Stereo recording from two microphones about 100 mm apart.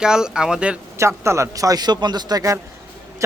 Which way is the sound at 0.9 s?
30° right (ahead or behind).